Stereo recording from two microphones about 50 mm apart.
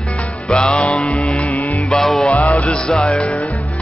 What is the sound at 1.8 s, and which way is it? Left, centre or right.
Music, centre.